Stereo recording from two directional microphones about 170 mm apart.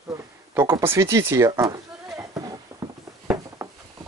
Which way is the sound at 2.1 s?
20° right (ahead or behind).